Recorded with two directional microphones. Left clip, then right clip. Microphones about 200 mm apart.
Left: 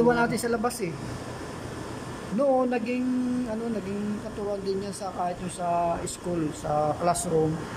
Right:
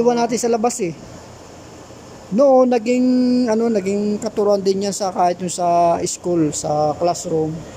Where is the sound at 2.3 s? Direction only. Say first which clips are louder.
Right 11 dB; 25° right (ahead or behind).